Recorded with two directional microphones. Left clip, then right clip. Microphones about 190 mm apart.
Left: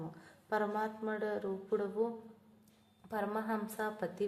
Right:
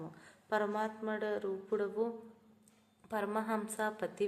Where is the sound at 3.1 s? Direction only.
10° right (ahead or behind).